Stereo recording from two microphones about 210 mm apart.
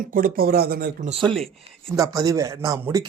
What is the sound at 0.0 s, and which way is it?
Speech, 40° right (ahead or behind).